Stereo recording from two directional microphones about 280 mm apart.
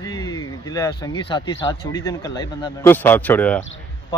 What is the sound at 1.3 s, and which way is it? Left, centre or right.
Speech, centre.